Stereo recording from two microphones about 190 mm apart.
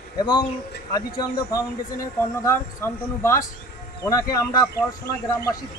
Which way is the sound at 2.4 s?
15° left (ahead or behind).